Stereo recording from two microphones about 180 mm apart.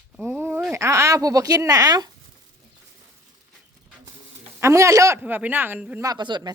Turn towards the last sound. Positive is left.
turn(degrees=-25)  # may be behind; listen again after turning